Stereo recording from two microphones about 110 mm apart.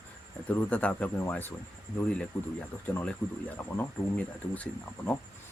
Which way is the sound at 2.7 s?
15° left (ahead or behind).